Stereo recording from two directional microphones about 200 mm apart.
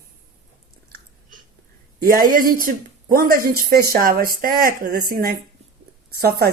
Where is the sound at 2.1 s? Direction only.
45° right (ahead or behind).